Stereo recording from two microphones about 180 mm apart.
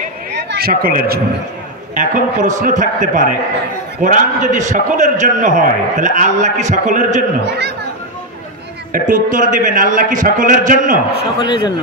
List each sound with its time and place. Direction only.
0.5 s speech: 55° right (ahead or behind)
2.0 s a man's voice: 45° right (ahead or behind)
7.4 s speech: 65° right (ahead or behind)
8.9 s a man's voice: 50° right (ahead or behind)
11.3 s speech: 25° left (ahead or behind)